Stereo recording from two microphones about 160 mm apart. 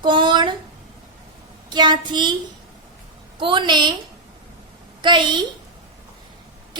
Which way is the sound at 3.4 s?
30° right (ahead or behind).